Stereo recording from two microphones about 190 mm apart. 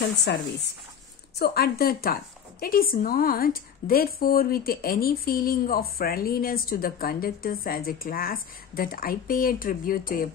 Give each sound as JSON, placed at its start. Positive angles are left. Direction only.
{"t": 0.3, "sound": "a woman's voice", "side_deg": 65}